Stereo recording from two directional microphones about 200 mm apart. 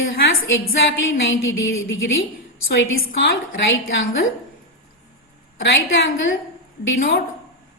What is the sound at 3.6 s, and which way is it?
Speech, 60° left (ahead or behind).